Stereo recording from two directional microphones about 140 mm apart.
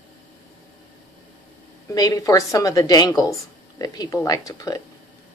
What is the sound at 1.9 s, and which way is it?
Speech, 25° left (ahead or behind).